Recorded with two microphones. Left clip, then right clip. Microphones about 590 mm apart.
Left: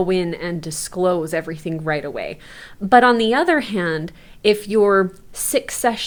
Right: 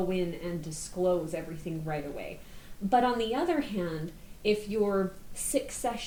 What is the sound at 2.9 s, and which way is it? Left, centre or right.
Speech, left.